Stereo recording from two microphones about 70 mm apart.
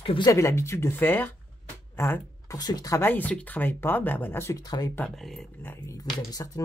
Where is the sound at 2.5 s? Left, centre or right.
Left.